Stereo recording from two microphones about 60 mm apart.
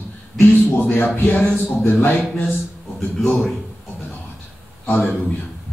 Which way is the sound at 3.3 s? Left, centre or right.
Left.